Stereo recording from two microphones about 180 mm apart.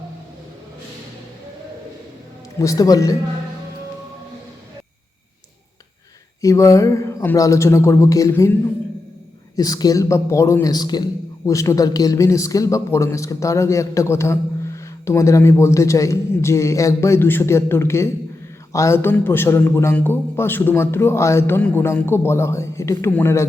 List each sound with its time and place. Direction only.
2.6 s speech: 20° left (ahead or behind)
6.4 s a man's voice: 20° left (ahead or behind)
9.6 s a man's voice: 20° left (ahead or behind)